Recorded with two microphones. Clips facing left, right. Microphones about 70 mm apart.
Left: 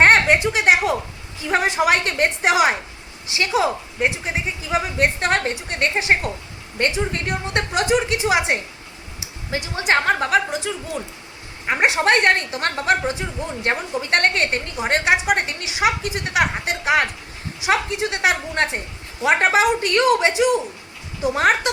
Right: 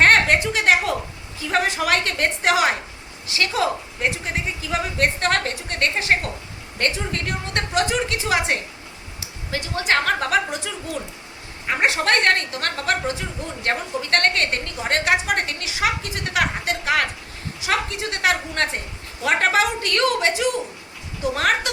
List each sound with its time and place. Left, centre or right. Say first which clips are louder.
0.0 s a sound: left 2 dB; centre
1.5 s a woman's voice: left 3 dB; centre
10.2 s a woman's voice: left 2 dB; centre
11.6 s a woman's voice: left 3 dB; centre